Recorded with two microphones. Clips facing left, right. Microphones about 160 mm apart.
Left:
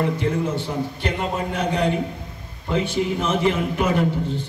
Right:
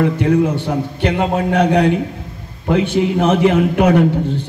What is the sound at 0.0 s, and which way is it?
A man's voice, 65° right (ahead or behind).